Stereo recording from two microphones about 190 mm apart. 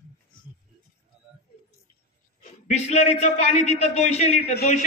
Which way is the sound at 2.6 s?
35° left (ahead or behind).